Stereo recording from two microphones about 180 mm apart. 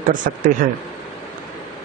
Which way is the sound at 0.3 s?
45° right (ahead or behind).